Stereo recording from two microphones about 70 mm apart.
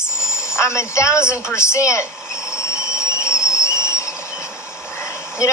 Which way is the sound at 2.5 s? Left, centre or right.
Left.